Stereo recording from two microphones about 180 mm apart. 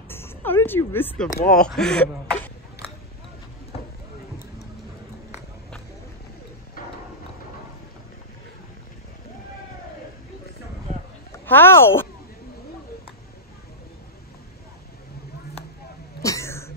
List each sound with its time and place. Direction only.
0.1 s speech: 15° left (ahead or behind)
6.8 s a sound: 50° left (ahead or behind)
11.4 s speech: 10° left (ahead or behind)
16.2 s cough: 15° left (ahead or behind)